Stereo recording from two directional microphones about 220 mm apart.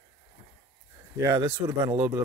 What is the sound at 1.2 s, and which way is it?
Speech, 15° right (ahead or behind).